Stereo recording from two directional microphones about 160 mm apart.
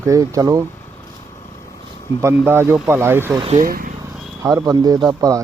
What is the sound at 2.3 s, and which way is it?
Speech, 15° right (ahead or behind).